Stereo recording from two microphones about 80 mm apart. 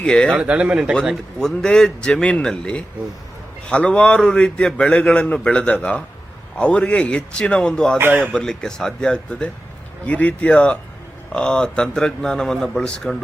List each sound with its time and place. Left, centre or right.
0.0 s a man's voice: centre
0.3 s speech: centre
1.1 s a man's voice: centre
7.9 s a man's voice: right
8.2 s a man's voice: centre